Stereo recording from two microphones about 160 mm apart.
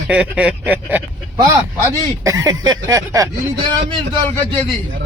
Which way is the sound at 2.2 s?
20° right (ahead or behind).